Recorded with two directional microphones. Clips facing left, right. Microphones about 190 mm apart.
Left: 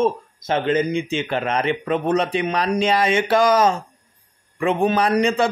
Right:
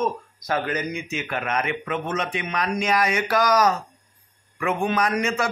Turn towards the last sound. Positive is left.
turn(degrees=35)  # may be behind; listen again after turning